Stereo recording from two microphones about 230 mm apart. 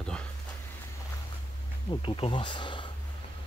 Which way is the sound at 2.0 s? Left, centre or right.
Left.